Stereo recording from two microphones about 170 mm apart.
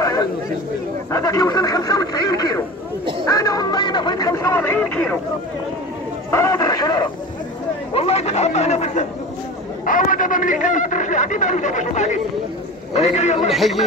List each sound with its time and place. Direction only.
0.0 s chatter: 20° left (ahead or behind)
1.1 s speech: 20° left (ahead or behind)
3.3 s a sound: 20° left (ahead or behind)
6.3 s speech: 20° left (ahead or behind)
7.9 s speech: 35° left (ahead or behind)
9.8 s a man's voice: 50° left (ahead or behind)
13.5 s speech: centre (ahead or behind)